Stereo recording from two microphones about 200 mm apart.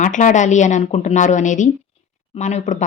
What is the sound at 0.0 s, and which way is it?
A woman's voice, 40° left (ahead or behind).